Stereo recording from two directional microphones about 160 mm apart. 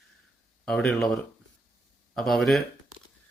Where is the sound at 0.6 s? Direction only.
5° left (ahead or behind).